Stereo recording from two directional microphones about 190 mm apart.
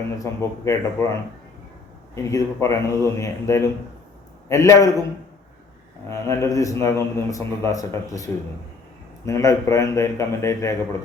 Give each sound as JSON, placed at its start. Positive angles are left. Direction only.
{"t": 0.2, "sound": "a man's voice", "side_deg": 15}
{"t": 2.1, "sound": "a man's voice", "side_deg": 15}
{"t": 6.1, "sound": "a man's voice", "side_deg": 15}